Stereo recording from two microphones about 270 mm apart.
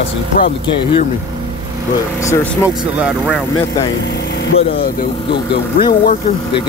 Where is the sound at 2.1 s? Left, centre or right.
Centre.